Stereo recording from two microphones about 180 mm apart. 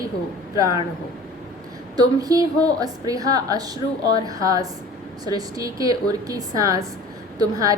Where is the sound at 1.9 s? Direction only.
20° right (ahead or behind).